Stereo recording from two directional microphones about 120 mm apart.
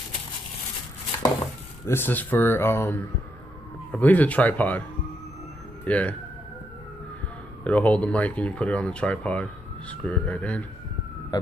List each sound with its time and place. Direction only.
1.9 s speech: 15° left (ahead or behind)
5.9 s speech: 10° left (ahead or behind)
7.6 s speech: 10° left (ahead or behind)